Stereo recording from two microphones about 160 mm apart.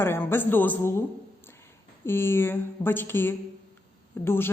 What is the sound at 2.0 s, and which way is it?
Speech, 15° left (ahead or behind).